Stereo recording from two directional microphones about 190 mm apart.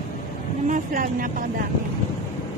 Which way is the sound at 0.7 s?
45° right (ahead or behind).